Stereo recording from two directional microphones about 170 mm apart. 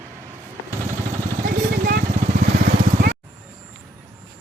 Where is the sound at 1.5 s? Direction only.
60° right (ahead or behind).